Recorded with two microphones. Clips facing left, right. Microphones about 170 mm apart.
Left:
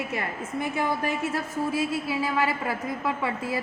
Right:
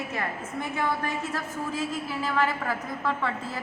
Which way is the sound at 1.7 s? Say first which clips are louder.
Left 3 dB; 15° left (ahead or behind).